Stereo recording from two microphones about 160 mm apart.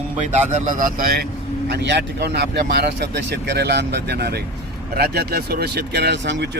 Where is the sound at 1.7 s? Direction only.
90° right.